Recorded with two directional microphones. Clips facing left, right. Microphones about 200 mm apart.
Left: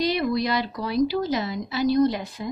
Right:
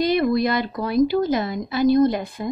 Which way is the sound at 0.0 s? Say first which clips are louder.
Right 4 dB; 50° right (ahead or behind).